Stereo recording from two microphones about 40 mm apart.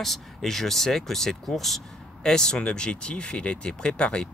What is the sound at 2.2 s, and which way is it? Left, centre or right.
Speech, centre.